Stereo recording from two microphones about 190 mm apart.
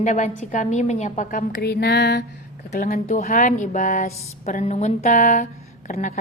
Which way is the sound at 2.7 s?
45° left (ahead or behind).